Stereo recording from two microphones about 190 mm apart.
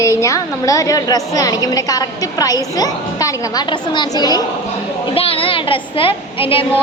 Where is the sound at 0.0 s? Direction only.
15° left (ahead or behind).